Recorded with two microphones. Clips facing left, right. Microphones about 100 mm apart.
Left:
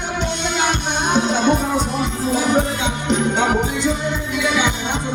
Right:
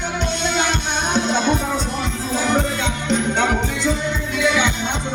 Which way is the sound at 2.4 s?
15° left (ahead or behind).